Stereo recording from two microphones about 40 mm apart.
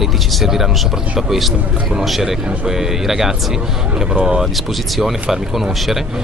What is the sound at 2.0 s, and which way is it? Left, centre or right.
Speech, centre.